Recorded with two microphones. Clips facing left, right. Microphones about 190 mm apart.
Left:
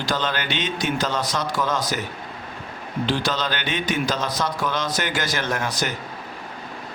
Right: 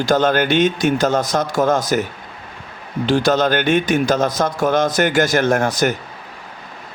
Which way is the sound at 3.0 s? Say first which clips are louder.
Right 9 dB; 45° right (ahead or behind).